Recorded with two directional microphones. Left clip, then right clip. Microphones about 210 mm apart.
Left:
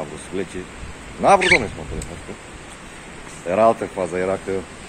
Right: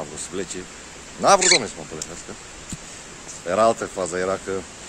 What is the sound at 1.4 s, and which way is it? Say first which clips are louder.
Speech: left 2 dB; 5° right (ahead or behind).